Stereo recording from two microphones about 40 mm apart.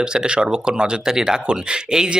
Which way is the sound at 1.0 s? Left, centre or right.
Centre.